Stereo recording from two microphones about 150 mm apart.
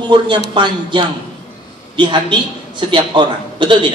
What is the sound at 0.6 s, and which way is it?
A woman's voice, 30° right (ahead or behind).